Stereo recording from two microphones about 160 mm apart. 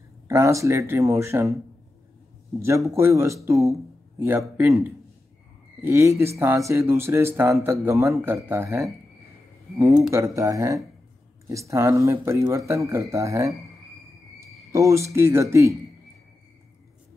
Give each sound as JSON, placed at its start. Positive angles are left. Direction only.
{"t": 0.3, "sound": "speech", "side_deg": -20}
{"t": 2.6, "sound": "speech", "side_deg": -20}
{"t": 14.7, "sound": "speech", "side_deg": -20}